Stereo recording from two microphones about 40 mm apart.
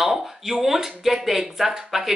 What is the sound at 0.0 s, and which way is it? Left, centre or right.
Speech, centre.